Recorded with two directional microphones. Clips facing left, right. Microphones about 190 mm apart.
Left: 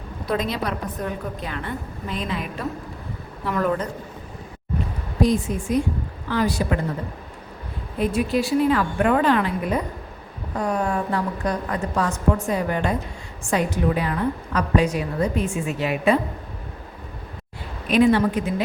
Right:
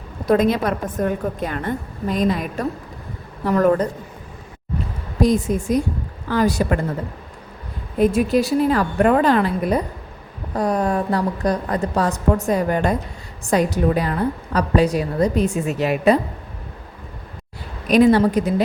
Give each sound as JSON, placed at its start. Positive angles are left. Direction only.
{"t": 0.3, "sound": "a woman's voice", "side_deg": -50}
{"t": 5.2, "sound": "a woman's voice", "side_deg": -40}
{"t": 7.9, "sound": "a woman's voice", "side_deg": -45}
{"t": 17.8, "sound": "a woman's voice", "side_deg": -40}